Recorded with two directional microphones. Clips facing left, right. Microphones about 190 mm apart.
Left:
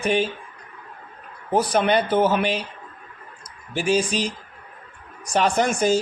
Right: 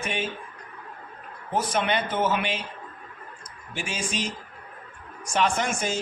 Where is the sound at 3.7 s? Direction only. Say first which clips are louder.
Left 10 dB; 35° left (ahead or behind).